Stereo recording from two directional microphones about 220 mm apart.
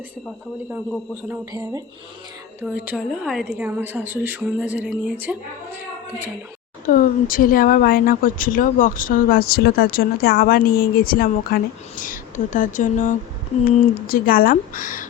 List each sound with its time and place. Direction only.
1.3 s a woman's voice: 15° right (ahead or behind)
6.8 s speech: 40° left (ahead or behind)